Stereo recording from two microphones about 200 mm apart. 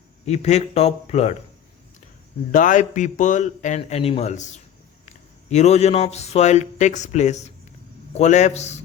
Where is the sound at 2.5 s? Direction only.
40° left (ahead or behind).